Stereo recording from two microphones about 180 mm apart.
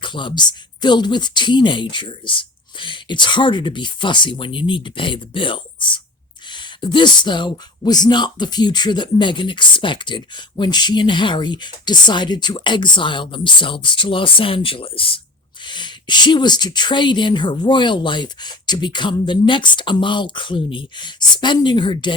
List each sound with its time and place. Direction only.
0.0 s speech: 25° left (ahead or behind)